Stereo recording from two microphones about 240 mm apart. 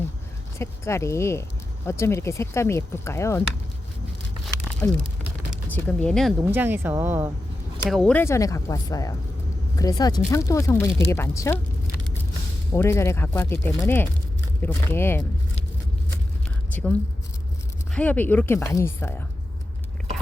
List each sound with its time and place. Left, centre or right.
0.6 s speech: centre
4.4 s a sound: centre
6.4 s speech: centre
7.9 s speech: centre
12.7 s speech: centre
17.9 s speech: centre